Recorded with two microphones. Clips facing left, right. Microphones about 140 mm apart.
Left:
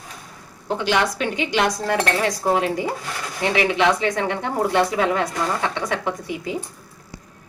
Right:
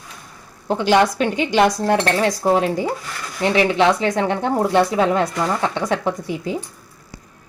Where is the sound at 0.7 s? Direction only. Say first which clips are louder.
Right 5 dB; 35° right (ahead or behind).